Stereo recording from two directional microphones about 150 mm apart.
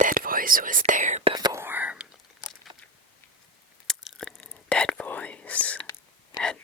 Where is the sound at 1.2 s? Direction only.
30° right (ahead or behind).